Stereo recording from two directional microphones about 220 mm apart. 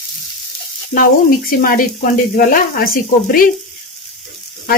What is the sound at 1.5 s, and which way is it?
Speech, 40° left (ahead or behind).